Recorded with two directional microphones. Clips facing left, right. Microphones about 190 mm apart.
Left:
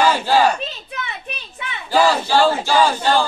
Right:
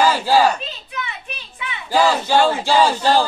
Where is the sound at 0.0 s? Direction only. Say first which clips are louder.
Even; 10° right (ahead or behind).